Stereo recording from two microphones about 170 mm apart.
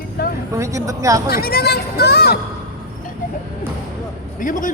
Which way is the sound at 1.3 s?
65° left (ahead or behind).